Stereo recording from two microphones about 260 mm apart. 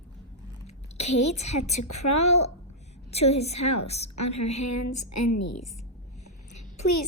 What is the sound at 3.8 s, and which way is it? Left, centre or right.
Speech, left.